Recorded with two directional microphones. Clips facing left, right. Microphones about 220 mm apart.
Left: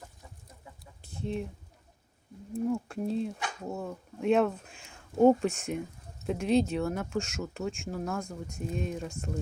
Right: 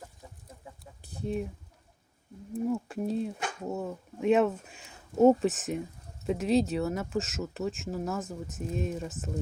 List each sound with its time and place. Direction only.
1.2 s speech: 5° right (ahead or behind)
2.5 s speech: 5° right (ahead or behind)